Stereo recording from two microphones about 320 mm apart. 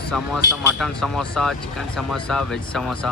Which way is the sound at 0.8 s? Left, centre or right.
Centre.